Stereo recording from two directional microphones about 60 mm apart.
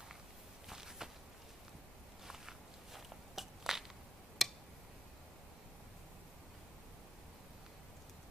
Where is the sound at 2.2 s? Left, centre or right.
Centre.